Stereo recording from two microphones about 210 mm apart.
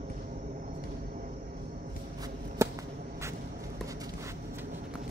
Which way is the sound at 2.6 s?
15° right (ahead or behind).